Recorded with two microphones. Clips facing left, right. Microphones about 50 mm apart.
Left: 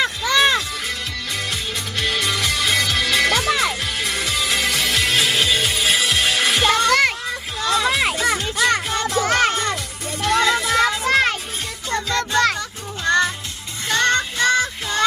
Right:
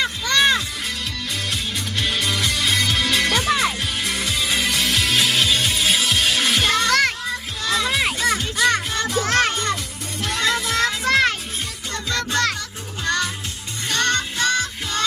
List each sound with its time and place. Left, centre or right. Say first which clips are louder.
0.0 s music: left 2 dB; centre
6.8 s music: left 2 dB; centre
11.9 s music: left 4 dB; left
13.1 s music: left 5 dB; left